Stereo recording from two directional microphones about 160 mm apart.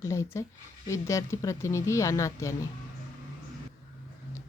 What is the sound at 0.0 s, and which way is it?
Speech, 20° left (ahead or behind).